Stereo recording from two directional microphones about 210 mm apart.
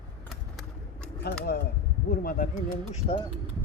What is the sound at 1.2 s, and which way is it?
Speech, 50° left (ahead or behind).